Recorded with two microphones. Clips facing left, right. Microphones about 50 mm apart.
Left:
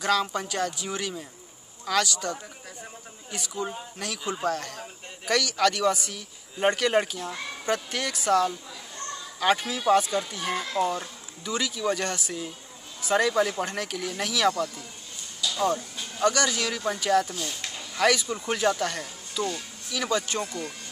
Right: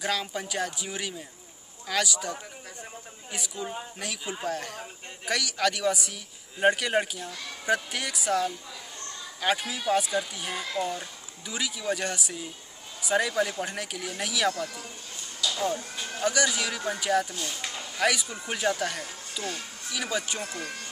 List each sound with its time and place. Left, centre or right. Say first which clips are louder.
0.0 s speech: left 5 dB; centre
7.2 s speech: left 5 dB; left
7.6 s speech: right 1 dB; centre
11.4 s speech: left 3 dB; centre
15.4 s a sound: left 3 dB; centre
16.3 s speech: left 2 dB; centre
20.4 s speech: left 1 dB; right